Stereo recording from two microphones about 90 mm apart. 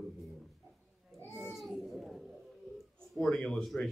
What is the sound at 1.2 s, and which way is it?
Speech, 30° left (ahead or behind).